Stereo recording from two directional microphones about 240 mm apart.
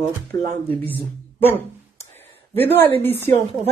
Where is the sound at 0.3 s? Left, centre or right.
Centre.